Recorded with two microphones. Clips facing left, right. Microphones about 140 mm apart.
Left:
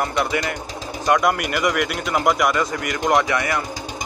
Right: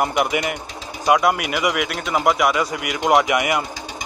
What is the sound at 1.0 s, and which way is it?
Speech, 5° right (ahead or behind).